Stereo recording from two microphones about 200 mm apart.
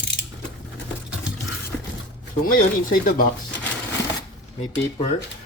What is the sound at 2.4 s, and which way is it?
Speech, 45° left (ahead or behind).